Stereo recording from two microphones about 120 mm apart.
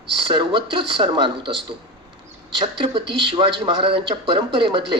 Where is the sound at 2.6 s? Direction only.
45° right (ahead or behind).